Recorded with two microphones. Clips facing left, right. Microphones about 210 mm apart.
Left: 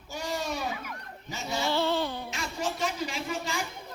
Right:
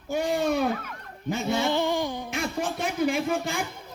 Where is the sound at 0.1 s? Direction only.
55° right (ahead or behind).